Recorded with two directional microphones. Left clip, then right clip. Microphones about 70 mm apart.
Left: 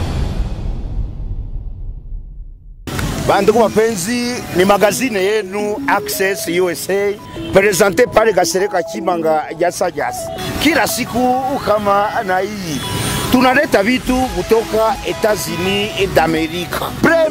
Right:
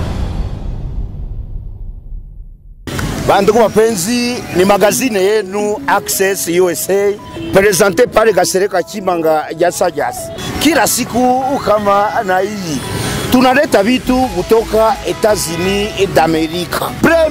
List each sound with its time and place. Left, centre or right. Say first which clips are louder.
3.3 s speech: right 2 dB; right
7.8 s speech: right 2 dB; centre; by 10.3 s right
10.4 s speech: right 3 dB; right
13.0 s music: even; left
13.3 s speech: right 2 dB; right